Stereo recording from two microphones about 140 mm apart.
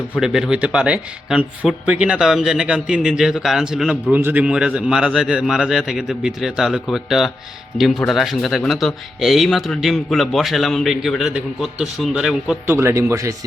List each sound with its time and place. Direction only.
0.2 s speech: 5° right (ahead or behind)
12.6 s speech: 20° right (ahead or behind)